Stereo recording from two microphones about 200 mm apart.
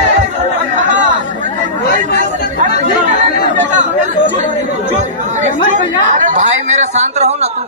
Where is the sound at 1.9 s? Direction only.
40° right (ahead or behind).